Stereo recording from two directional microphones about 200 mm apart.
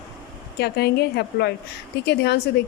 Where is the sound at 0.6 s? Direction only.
55° left (ahead or behind).